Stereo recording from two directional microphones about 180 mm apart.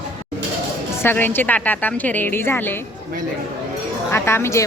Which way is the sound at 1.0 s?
10° left (ahead or behind).